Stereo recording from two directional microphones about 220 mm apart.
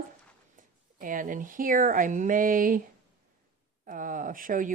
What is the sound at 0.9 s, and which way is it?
Speech, 40° right (ahead or behind).